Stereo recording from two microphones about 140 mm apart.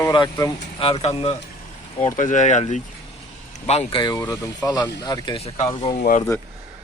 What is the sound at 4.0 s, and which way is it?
Speech, 30° left (ahead or behind).